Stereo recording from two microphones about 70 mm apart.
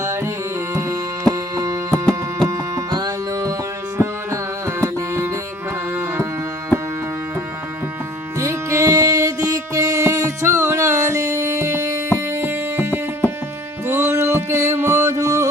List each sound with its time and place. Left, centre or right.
0.0 s tabla: right
0.7 s music: right
1.9 s music: centre
3.9 s music: right
5.9 s tabla: right
8.4 s music: right